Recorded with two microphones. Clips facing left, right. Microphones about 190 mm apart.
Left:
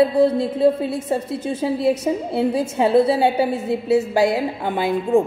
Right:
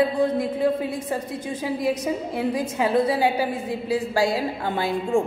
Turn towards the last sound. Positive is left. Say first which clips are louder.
# left 5 dB
turn(degrees=20)  # may be behind; listen again after turning